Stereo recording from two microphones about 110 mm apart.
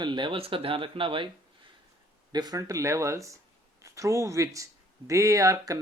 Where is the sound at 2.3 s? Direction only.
35° right (ahead or behind).